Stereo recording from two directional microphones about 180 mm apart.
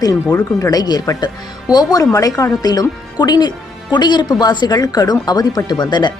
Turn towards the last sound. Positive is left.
turn(degrees=25)  # may be behind; listen again after turning